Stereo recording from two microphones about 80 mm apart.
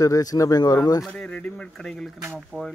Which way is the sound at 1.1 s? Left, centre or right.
Centre.